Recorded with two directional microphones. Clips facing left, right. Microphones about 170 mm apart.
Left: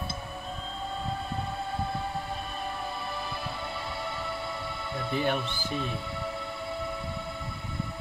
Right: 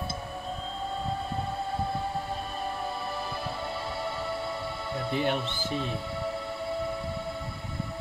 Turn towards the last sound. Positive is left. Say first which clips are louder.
# right 3 dB
turn(degrees=-35)  # may be behind; listen again after turning